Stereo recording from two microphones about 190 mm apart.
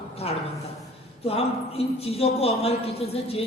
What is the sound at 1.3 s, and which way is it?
A man's voice, 30° left (ahead or behind).